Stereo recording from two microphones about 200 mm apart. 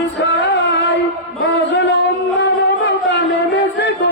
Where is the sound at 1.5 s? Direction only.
60° left (ahead or behind).